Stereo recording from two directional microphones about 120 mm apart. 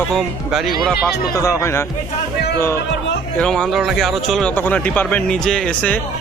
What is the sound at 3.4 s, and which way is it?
Speech, 5° left (ahead or behind).